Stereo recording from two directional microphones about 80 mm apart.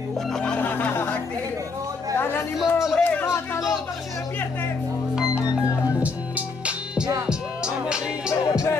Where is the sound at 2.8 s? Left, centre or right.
Centre.